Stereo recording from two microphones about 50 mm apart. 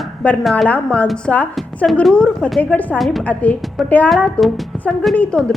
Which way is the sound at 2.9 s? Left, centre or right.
Centre.